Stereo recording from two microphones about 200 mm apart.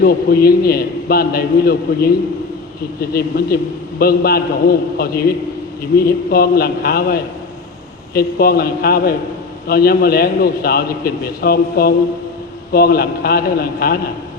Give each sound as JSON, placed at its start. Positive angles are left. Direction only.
{"t": 0.0, "sound": "a man's voice", "side_deg": 50}